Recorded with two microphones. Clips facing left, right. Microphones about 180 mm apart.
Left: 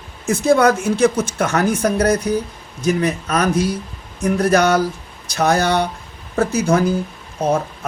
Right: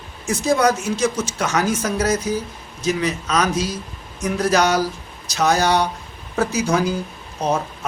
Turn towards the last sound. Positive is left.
turn(degrees=55)  # may be behind; listen again after turning